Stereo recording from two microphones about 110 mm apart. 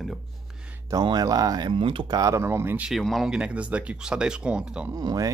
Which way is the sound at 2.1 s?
35° right (ahead or behind).